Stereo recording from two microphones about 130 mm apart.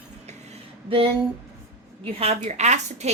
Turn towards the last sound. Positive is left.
turn(degrees=-60)  # may be behind; listen again after turning